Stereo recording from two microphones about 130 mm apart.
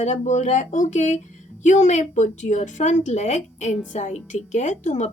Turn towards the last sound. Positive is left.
turn(degrees=65)  # may be behind; listen again after turning